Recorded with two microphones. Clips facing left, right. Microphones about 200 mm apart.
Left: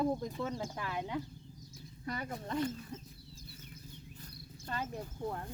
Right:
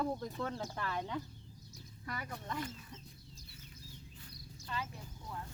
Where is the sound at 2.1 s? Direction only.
25° left (ahead or behind).